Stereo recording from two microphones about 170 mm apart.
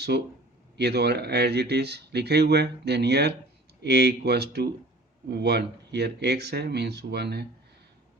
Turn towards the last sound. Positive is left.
turn(degrees=-75)  # may be behind; listen again after turning